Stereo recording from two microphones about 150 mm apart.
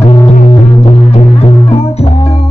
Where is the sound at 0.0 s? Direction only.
40° left (ahead or behind).